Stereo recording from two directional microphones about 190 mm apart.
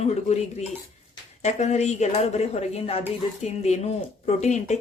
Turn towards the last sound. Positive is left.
turn(degrees=35)  # may be behind; listen again after turning